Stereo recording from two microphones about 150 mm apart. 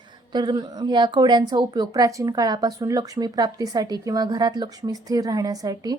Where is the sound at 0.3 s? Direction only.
25° right (ahead or behind).